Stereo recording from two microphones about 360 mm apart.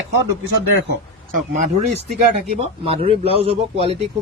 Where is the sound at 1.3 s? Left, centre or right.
Centre.